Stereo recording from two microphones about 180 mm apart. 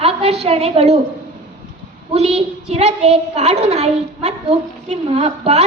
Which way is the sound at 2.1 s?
35° right (ahead or behind).